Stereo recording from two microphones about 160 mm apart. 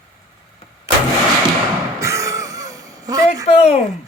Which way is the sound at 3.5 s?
40° left (ahead or behind).